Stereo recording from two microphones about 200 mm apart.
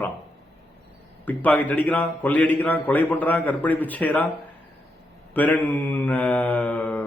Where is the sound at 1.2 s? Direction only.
10° left (ahead or behind).